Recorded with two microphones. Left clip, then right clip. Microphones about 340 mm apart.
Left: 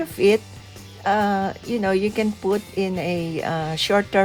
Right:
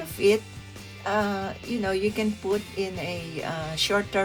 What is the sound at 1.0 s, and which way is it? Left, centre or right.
Speech, left.